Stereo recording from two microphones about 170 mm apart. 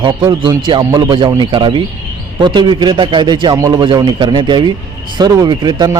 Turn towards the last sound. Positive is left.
turn(degrees=-25)  # may be behind; listen again after turning